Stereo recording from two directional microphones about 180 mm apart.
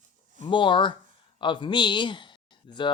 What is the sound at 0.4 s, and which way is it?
Speech, 25° left (ahead or behind).